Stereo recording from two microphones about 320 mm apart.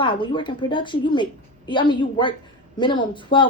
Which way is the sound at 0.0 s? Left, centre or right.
Centre.